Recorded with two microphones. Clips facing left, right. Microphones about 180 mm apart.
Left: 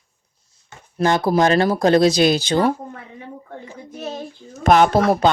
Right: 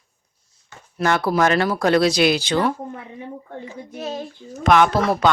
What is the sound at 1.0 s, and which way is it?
Speech, 30° left (ahead or behind).